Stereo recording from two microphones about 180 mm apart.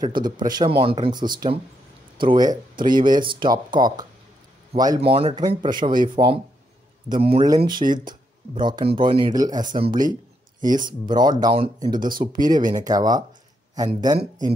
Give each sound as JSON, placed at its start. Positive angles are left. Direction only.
{"t": 0.0, "sound": "speech", "side_deg": -25}
{"t": 7.4, "sound": "speech", "side_deg": -20}
{"t": 10.9, "sound": "speech", "side_deg": -25}